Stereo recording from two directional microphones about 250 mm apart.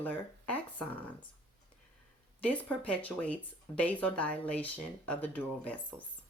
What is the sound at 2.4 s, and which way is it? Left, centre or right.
Speech, centre.